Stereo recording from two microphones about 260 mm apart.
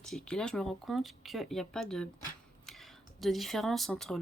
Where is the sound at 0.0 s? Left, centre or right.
Centre.